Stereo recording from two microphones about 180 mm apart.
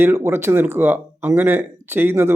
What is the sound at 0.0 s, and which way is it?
Speech, 15° right (ahead or behind).